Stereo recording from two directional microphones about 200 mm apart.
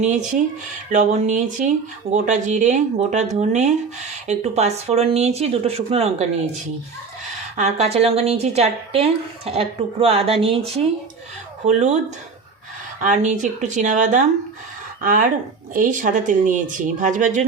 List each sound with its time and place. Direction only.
0.0 s a woman's voice: 40° right (ahead or behind)
7.5 s a woman's voice: 35° right (ahead or behind)
13.0 s a woman's voice: 40° right (ahead or behind)